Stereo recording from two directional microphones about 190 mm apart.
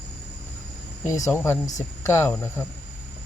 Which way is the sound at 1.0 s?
15° left (ahead or behind).